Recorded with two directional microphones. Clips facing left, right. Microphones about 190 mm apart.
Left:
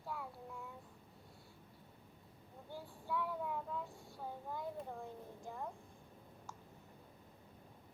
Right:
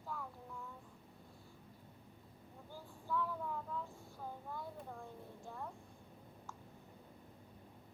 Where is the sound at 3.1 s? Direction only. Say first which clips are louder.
Even; 10° left (ahead or behind).